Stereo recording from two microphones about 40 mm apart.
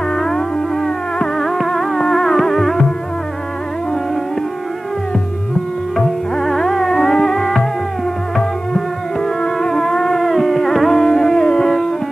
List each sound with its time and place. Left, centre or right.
0.1 s music: centre
1.4 s music: centre
6.3 s music: centre